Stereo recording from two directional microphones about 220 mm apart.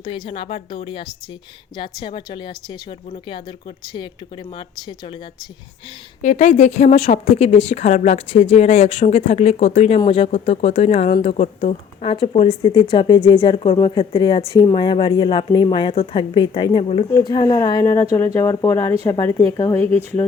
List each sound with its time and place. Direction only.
0.0 s speech: 25° left (ahead or behind)
4.5 s speech: 20° left (ahead or behind)
6.2 s a woman's voice: 30° left (ahead or behind); by 19.9 s 15° left (ahead or behind)